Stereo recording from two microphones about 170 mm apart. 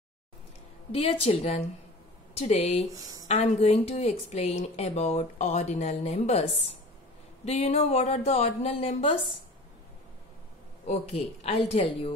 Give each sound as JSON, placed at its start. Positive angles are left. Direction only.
{"t": 0.9, "sound": "speech", "side_deg": 35}
{"t": 7.4, "sound": "speech", "side_deg": 35}
{"t": 10.9, "sound": "speech", "side_deg": 35}